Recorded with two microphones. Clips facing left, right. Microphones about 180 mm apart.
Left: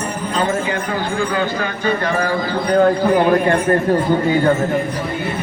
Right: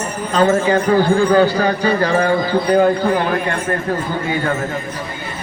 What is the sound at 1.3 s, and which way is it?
Speech, 35° right (ahead or behind).